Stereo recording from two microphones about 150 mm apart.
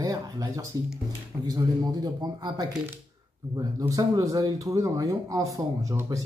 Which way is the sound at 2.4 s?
30° right (ahead or behind).